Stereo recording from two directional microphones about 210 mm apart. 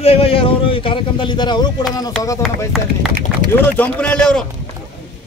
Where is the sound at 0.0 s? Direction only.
25° left (ahead or behind).